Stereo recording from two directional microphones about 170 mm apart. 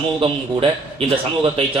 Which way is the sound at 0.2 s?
35° right (ahead or behind).